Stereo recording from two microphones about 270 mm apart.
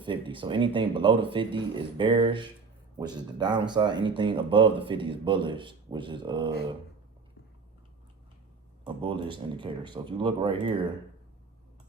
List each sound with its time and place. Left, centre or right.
0.0 s speech: centre
8.8 s speech: centre